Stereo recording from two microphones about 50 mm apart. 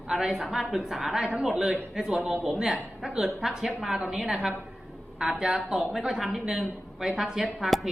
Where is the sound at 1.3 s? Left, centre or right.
Right.